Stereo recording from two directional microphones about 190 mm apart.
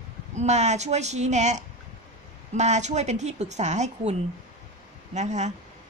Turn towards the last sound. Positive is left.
turn(degrees=-40)  # may be behind; listen again after turning